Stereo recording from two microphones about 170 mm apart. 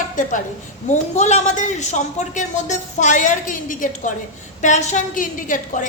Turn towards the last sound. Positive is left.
turn(degrees=50)  # may be behind; listen again after turning